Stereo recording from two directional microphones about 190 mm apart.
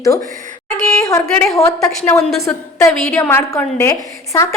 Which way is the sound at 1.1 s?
10° left (ahead or behind).